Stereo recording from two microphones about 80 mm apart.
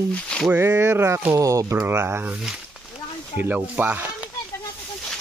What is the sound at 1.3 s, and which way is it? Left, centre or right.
Speech, right.